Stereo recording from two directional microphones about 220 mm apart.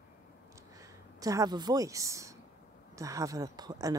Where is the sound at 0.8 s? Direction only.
15° right (ahead or behind).